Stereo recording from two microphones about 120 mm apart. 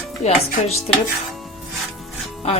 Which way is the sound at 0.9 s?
60° left (ahead or behind).